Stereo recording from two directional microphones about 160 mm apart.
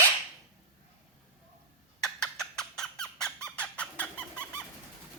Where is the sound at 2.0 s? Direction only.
5° left (ahead or behind).